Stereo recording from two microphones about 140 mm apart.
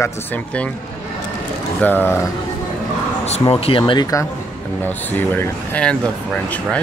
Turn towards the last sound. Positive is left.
turn(degrees=5)  # may be behind; listen again after turning